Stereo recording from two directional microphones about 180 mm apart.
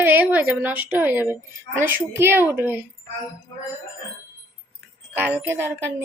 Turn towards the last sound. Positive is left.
turn(degrees=-10)  # may be behind; listen again after turning